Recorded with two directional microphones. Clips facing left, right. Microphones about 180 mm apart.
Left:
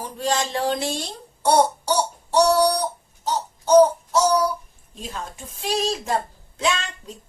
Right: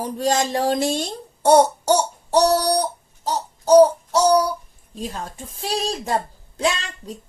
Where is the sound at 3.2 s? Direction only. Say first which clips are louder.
Right 1 dB; 35° right (ahead or behind).